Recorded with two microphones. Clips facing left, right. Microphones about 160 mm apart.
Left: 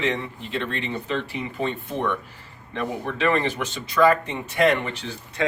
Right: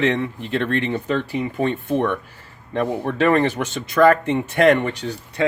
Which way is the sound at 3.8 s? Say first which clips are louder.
Right 4 dB; 55° right (ahead or behind).